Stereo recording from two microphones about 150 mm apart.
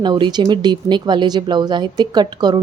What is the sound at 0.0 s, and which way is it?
A woman's voice, 30° right (ahead or behind).